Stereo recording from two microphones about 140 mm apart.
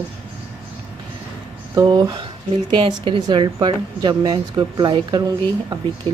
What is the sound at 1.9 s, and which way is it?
A woman's voice, 35° right (ahead or behind).